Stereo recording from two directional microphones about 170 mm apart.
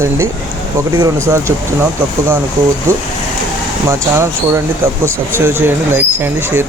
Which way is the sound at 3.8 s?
15° right (ahead or behind).